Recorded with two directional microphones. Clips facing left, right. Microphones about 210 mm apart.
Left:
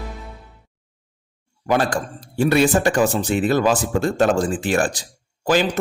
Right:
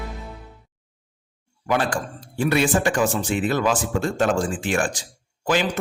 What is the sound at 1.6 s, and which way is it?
Speech, 40° left (ahead or behind).